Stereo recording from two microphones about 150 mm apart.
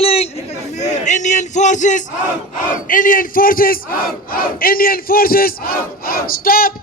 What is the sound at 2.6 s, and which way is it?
Battle cry, 60° left (ahead or behind).